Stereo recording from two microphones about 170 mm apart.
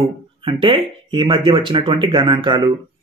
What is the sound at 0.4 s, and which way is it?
Speech, 30° right (ahead or behind).